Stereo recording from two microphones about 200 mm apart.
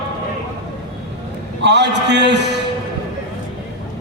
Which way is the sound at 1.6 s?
60° right (ahead or behind).